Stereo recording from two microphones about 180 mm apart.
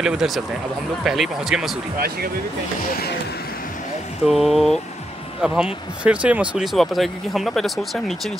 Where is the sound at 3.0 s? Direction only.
60° left (ahead or behind).